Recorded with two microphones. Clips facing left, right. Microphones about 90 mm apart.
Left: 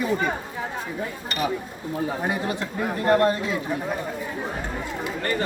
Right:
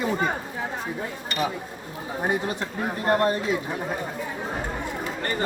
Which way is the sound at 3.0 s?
25° right (ahead or behind).